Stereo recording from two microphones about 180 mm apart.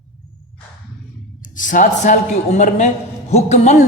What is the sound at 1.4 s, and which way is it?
A man's voice, 45° left (ahead or behind).